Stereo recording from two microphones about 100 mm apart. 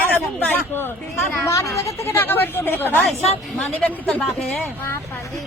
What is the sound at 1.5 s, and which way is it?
A woman's voice, 30° left (ahead or behind).